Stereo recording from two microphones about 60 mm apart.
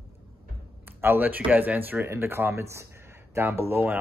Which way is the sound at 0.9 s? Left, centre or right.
Right.